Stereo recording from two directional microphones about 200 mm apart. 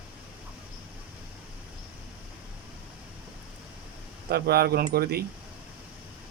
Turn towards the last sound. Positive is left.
turn(degrees=-50)  # may be behind; listen again after turning